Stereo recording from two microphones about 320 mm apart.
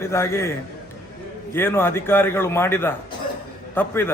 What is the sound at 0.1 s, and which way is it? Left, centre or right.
Speech, centre.